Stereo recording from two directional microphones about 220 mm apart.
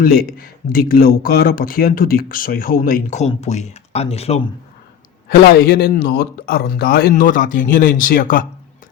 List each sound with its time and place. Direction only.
0.0 s speech: 40° left (ahead or behind)
5.3 s speech: 45° left (ahead or behind)